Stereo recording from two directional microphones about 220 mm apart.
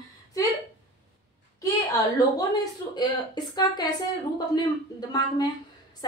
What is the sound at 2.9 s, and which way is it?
A woman's voice, 20° left (ahead or behind).